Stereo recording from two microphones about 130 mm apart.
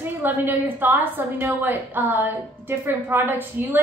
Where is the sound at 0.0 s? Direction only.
15° right (ahead or behind).